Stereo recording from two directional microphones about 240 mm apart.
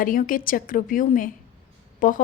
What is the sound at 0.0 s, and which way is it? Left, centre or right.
A woman's voice, left.